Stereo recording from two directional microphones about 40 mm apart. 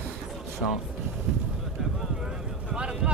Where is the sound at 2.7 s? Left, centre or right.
Right.